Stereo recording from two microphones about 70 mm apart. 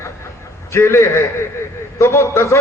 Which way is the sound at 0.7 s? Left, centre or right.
Left.